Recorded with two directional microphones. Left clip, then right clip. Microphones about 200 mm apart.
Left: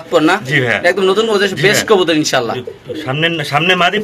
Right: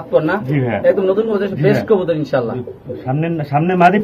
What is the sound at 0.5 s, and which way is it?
Speech, 5° left (ahead or behind).